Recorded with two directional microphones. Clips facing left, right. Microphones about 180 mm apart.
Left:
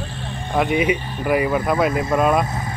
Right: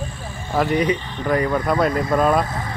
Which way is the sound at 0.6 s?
15° left (ahead or behind).